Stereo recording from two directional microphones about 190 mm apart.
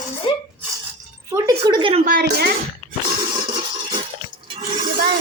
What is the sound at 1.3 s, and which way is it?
Speech, 20° right (ahead or behind).